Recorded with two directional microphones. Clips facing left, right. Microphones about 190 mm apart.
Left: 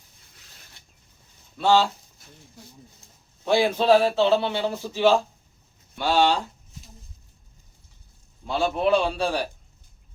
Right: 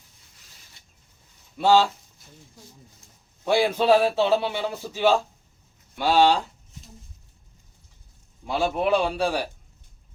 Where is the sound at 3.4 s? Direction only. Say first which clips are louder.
Even; 10° right (ahead or behind).